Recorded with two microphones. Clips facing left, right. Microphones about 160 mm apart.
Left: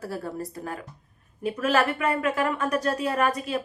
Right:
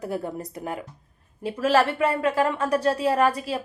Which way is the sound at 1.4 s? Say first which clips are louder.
Right 2 dB; 30° right (ahead or behind).